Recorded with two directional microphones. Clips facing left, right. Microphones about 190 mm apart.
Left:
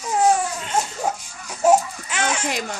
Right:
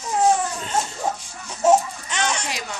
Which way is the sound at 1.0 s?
10° left (ahead or behind).